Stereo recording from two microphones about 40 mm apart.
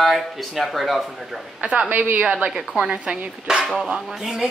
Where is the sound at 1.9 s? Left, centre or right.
Right.